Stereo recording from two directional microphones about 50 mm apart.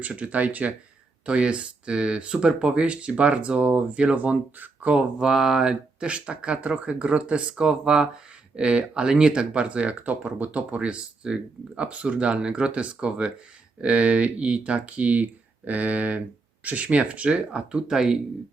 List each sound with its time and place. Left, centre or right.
0.0 s speech: right
4.9 s speech: centre
6.1 s speech: right